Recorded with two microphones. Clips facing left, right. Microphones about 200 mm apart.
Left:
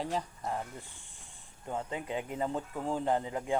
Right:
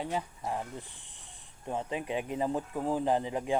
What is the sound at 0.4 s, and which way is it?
Speech, 15° right (ahead or behind).